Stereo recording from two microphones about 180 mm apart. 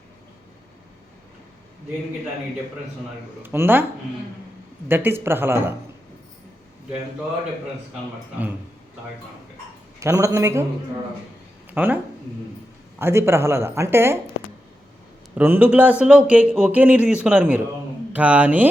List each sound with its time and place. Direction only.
3.4 s speech: 10° right (ahead or behind)
4.9 s speech: 10° right (ahead or behind)
10.0 s speech: 15° right (ahead or behind)
11.7 s speech: 10° right (ahead or behind)
13.0 s speech: 15° right (ahead or behind)
15.4 s speech: 10° right (ahead or behind)